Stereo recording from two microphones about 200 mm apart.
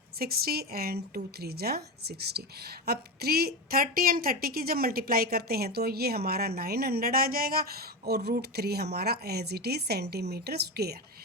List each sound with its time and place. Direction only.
0.2 s a woman's voice: 50° right (ahead or behind)